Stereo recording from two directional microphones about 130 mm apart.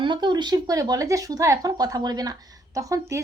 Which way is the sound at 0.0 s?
35° right (ahead or behind).